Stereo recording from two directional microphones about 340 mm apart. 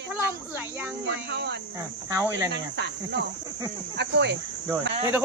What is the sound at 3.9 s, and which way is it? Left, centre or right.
Speech, right.